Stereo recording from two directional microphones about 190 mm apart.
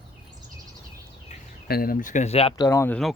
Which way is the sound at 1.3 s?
40° left (ahead or behind).